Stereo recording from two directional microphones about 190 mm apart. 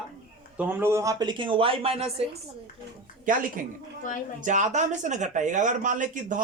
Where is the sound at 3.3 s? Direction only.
45° right (ahead or behind).